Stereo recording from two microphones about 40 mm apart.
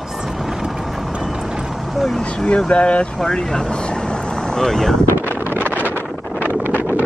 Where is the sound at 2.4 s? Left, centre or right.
Left.